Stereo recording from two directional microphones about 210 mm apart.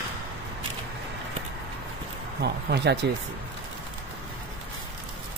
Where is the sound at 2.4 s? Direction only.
50° right (ahead or behind).